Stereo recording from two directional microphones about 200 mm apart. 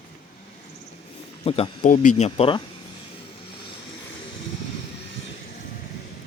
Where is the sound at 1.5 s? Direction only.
30° left (ahead or behind).